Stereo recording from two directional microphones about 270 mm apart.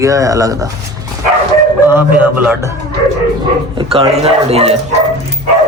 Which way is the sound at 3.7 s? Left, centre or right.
Right.